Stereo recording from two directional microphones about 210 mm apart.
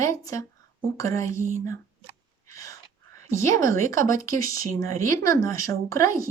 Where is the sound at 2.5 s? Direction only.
15° left (ahead or behind).